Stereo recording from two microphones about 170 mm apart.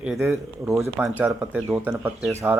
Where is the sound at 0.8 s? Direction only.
15° right (ahead or behind).